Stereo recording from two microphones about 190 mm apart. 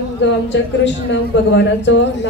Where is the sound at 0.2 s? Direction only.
70° left (ahead or behind).